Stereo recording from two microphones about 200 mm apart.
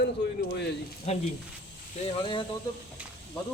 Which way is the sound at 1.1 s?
30° left (ahead or behind).